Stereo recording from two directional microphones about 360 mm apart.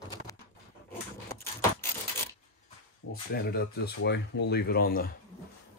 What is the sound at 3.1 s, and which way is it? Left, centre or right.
Speech, left.